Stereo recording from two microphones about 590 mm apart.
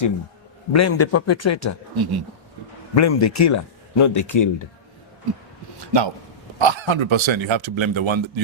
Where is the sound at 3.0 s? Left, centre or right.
Left.